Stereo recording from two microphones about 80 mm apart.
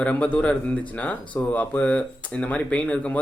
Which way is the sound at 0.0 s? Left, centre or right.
Centre.